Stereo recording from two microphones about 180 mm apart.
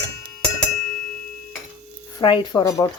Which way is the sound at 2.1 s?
25° left (ahead or behind).